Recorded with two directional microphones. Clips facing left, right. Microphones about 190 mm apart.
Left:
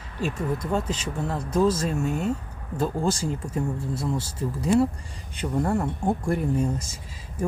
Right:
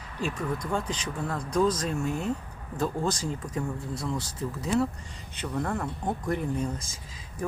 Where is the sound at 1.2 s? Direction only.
25° left (ahead or behind).